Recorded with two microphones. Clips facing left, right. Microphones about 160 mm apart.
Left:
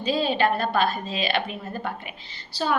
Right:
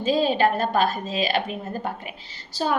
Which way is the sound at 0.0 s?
40° right (ahead or behind).